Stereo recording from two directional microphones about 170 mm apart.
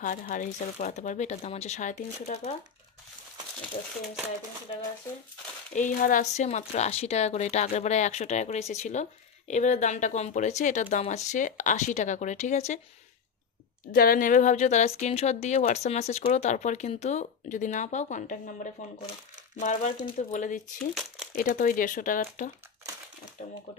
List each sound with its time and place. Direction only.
0.0 s speech: 50° left (ahead or behind)
5.8 s a woman's voice: 50° left (ahead or behind)
13.9 s speech: 55° left (ahead or behind)